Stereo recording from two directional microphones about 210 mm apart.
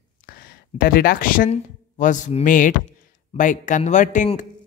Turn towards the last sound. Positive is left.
turn(degrees=35)  # may be behind; listen again after turning